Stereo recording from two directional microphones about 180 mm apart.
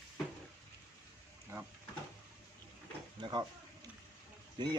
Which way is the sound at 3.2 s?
25° right (ahead or behind).